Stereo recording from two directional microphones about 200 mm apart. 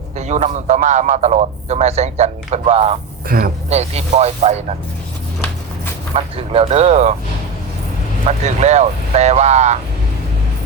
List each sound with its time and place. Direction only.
0.2 s a man's voice: 35° right (ahead or behind)
3.2 s speech: 45° right (ahead or behind)
3.7 s a man's voice: 30° right (ahead or behind)
6.1 s a man's voice: 30° right (ahead or behind)
8.3 s a man's voice: 35° right (ahead or behind)